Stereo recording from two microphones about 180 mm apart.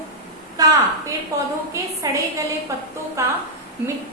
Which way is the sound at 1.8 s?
15° right (ahead or behind).